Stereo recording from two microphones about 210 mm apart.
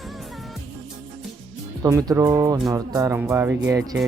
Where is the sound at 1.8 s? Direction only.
15° right (ahead or behind).